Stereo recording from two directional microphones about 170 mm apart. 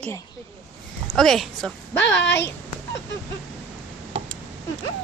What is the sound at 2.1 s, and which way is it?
Speech, 90° left.